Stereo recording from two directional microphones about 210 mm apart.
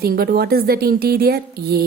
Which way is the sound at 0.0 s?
45° right (ahead or behind).